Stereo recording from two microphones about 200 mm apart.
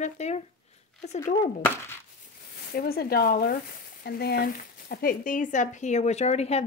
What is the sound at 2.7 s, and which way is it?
Speech, 50° left (ahead or behind).